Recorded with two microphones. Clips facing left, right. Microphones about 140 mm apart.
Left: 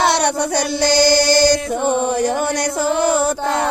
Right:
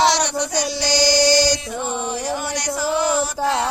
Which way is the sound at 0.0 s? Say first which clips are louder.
Left 2 dB; 55° left (ahead or behind).